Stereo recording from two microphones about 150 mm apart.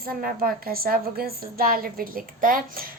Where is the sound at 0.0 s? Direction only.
80° right.